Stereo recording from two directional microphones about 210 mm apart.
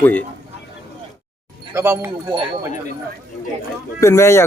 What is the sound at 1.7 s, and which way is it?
Speech, 10° right (ahead or behind).